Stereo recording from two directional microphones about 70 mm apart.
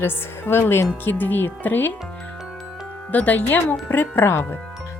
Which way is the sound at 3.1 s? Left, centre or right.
Left.